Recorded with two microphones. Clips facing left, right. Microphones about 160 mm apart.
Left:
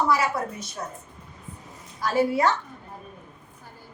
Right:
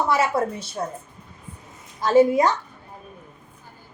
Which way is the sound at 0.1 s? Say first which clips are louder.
Right 3 dB; 25° right (ahead or behind).